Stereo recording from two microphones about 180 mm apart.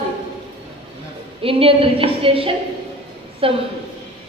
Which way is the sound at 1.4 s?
30° right (ahead or behind).